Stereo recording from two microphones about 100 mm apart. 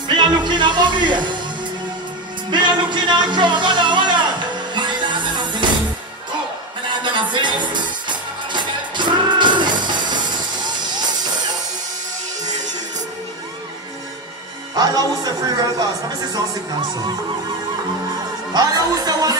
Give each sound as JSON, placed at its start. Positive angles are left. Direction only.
{"t": 0.1, "sound": "music", "side_deg": -45}
{"t": 2.5, "sound": "music", "side_deg": -50}
{"t": 6.9, "sound": "music", "side_deg": -55}
{"t": 14.8, "sound": "music", "side_deg": -40}
{"t": 18.5, "sound": "music", "side_deg": -40}